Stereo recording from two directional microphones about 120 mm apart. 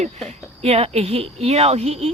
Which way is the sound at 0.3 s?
60° right (ahead or behind).